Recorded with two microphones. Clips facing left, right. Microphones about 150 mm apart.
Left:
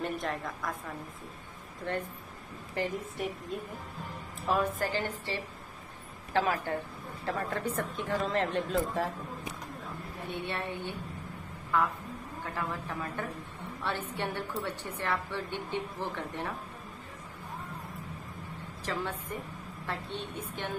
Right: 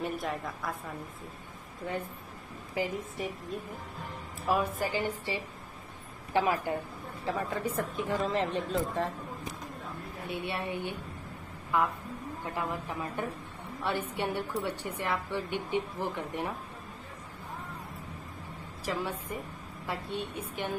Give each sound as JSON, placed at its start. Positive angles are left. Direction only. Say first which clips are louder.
{"t": 0.0, "sound": "speech", "louder": "even", "side_deg": -5}
{"t": 1.9, "sound": "a woman's voice", "louder": "left 1 dB", "side_deg": -5}
{"t": 4.5, "sound": "a woman's voice", "louder": "even", "side_deg": -10}
{"t": 10.4, "sound": "a woman's voice", "louder": "right 2 dB", "side_deg": -10}
{"t": 18.9, "sound": "a woman's voice", "louder": "right 1 dB", "side_deg": -10}